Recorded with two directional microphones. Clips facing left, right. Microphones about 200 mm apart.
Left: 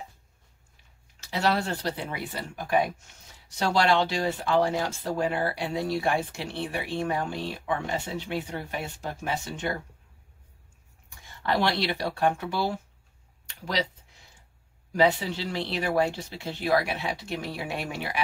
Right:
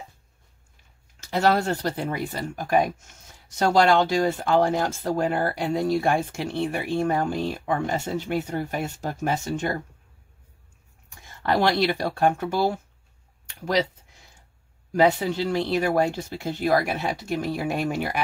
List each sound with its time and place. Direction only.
1.3 s speech: 45° right (ahead or behind)
11.4 s speech: 45° right (ahead or behind)
14.9 s speech: 50° right (ahead or behind)